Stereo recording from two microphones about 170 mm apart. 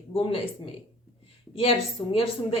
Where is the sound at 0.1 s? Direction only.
30° left (ahead or behind).